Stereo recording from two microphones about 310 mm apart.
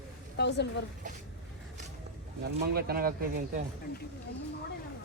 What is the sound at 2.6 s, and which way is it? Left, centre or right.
Speech, right.